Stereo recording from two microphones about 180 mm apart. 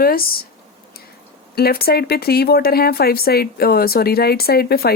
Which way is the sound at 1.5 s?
60° left (ahead or behind).